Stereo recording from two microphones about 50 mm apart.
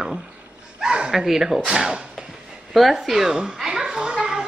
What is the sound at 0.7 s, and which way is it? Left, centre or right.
Speech, centre.